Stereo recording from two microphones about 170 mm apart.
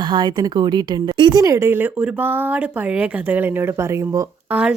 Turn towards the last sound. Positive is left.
turn(degrees=-15)  # may be behind; listen again after turning